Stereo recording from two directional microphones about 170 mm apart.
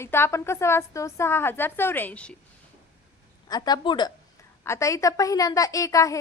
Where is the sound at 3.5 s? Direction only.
25° left (ahead or behind).